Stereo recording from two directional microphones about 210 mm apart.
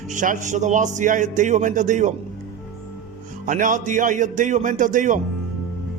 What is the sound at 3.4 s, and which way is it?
A man's voice, 40° right (ahead or behind).